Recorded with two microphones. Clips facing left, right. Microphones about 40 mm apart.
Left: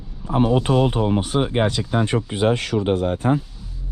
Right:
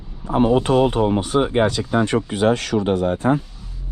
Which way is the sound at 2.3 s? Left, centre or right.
Centre.